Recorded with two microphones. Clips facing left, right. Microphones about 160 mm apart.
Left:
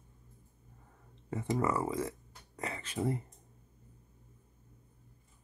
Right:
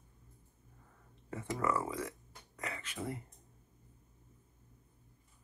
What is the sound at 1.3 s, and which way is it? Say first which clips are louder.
Speech: left 3 dB; 25° left (ahead or behind).